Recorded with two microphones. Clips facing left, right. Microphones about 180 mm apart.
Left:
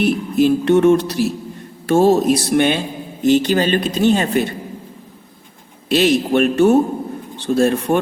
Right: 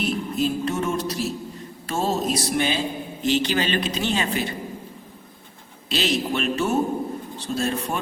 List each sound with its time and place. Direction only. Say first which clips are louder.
0.0 s speech: left 9 dB; 65° left (ahead or behind)
3.2 s speech: left 8 dB; 50° left (ahead or behind)
5.9 s speech: left 9 dB; 55° left (ahead or behind)